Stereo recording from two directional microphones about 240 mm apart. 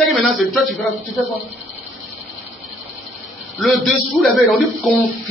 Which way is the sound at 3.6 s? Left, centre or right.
Centre.